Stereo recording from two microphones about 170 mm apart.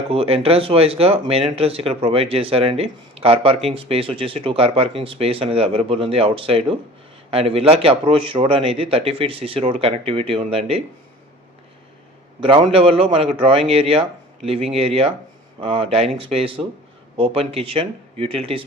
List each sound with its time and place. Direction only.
0.1 s a man's voice: 35° right (ahead or behind)
12.4 s a man's voice: 30° right (ahead or behind)